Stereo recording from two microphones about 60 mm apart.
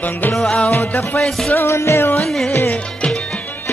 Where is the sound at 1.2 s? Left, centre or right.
Centre.